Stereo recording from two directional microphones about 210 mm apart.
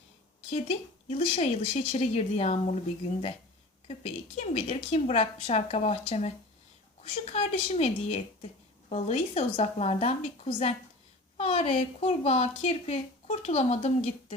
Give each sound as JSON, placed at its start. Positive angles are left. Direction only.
{"t": 0.5, "sound": "a woman's voice", "side_deg": 30}
{"t": 3.8, "sound": "a woman's voice", "side_deg": 35}
{"t": 7.3, "sound": "a woman's voice", "side_deg": 30}